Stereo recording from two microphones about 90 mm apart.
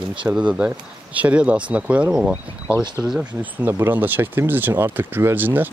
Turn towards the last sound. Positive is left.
turn(degrees=-20)  # may be behind; listen again after turning